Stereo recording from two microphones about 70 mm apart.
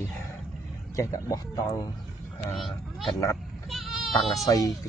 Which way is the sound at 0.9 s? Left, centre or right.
Left.